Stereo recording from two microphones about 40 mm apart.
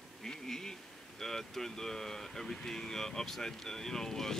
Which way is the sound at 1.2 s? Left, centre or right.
Centre.